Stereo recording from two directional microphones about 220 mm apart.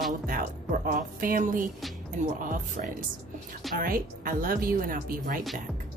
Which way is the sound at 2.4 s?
35° right (ahead or behind).